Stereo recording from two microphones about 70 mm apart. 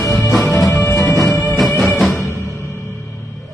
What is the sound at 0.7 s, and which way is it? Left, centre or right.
Music, left.